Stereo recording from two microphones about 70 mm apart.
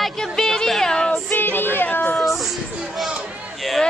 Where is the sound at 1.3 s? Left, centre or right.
Left.